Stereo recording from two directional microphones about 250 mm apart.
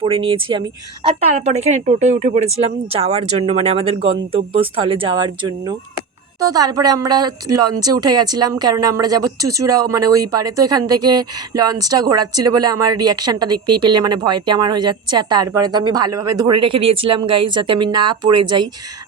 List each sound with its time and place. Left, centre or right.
0.0 s speech: centre